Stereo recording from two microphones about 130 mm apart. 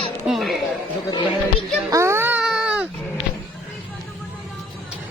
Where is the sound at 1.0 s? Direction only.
35° left (ahead or behind).